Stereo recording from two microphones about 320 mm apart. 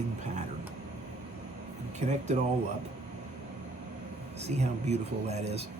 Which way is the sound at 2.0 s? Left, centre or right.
Right.